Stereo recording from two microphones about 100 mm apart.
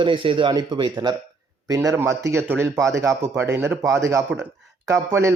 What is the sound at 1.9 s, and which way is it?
Speech, 30° right (ahead or behind).